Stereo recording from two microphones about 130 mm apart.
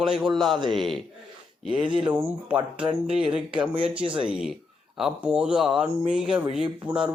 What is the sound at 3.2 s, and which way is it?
Speech, 5° right (ahead or behind).